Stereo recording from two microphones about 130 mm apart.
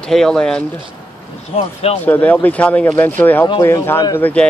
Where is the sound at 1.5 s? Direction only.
45° left (ahead or behind).